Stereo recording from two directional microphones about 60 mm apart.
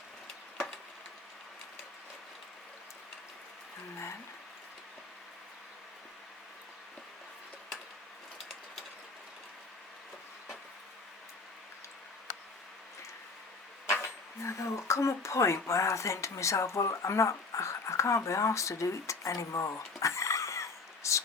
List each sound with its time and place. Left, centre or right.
14.4 s speech: left